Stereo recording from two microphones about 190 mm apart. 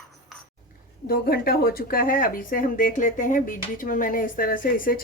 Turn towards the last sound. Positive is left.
turn(degrees=45)  # may be behind; listen again after turning